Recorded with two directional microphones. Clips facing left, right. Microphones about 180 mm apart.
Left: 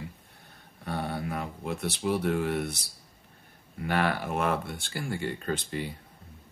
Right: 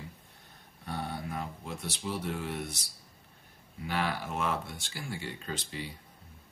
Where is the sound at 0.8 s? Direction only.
65° left (ahead or behind).